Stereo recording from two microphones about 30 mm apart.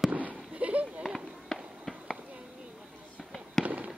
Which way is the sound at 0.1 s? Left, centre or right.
Right.